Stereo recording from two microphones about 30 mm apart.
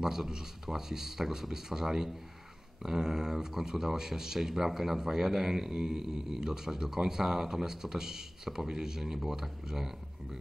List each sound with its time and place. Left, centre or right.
0.0 s speech: centre